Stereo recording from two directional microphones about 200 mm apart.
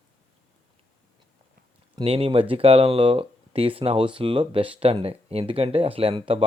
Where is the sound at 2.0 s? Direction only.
30° right (ahead or behind).